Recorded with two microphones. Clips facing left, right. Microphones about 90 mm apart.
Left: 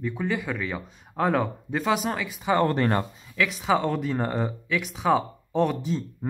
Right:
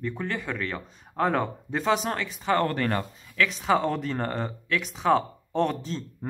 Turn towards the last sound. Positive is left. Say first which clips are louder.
# left 5 dB
turn(degrees=10)  # may be behind; listen again after turning